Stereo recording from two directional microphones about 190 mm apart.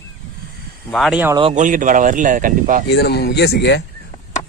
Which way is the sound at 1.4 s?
40° right (ahead or behind).